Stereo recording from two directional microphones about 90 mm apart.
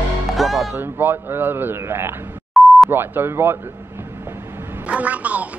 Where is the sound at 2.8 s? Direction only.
25° right (ahead or behind).